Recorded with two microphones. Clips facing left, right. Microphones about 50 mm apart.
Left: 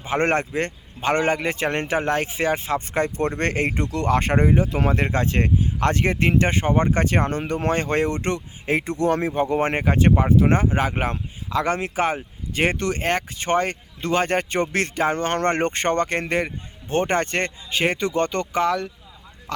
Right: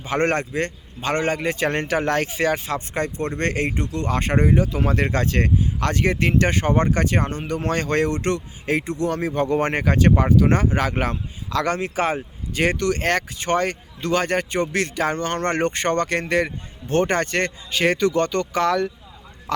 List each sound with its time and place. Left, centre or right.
0.0 s speech: left
4.4 s speech: left
6.7 s speech: centre
6.9 s speech: left
7.6 s speech: left
12.5 s speech: left
15.0 s speech: left
18.5 s speech: centre
19.5 s speech: centre